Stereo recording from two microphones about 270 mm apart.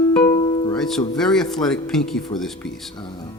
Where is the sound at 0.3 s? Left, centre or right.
Centre.